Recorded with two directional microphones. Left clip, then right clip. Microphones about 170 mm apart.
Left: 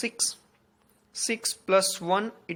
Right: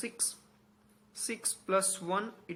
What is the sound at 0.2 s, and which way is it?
Speech, 30° left (ahead or behind).